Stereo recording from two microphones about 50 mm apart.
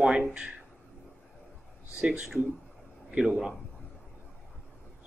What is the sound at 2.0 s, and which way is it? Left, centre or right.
A man's voice, centre.